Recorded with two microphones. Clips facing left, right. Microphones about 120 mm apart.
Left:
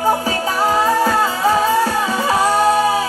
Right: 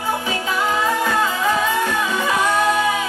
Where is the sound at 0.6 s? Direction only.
35° left (ahead or behind).